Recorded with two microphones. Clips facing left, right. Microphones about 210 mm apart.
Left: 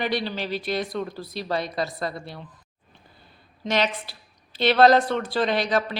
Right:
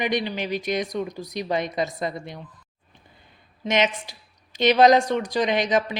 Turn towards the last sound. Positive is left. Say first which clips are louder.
# right 1 dB
turn(degrees=-20)  # may be behind; listen again after turning